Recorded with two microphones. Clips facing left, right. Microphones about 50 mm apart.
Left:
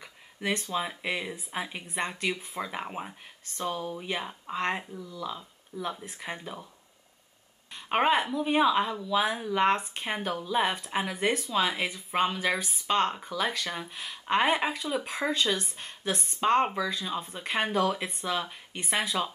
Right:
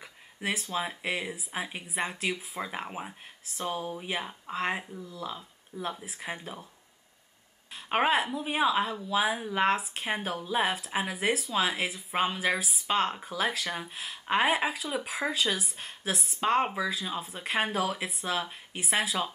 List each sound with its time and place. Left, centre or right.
0.0 s speech: centre
3.6 s speech: right
3.9 s speech: centre
7.7 s a woman's voice: centre